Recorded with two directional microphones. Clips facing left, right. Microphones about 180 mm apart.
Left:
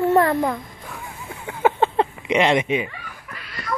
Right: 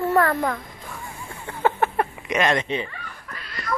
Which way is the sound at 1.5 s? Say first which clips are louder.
Left 3 dB; 15° left (ahead or behind).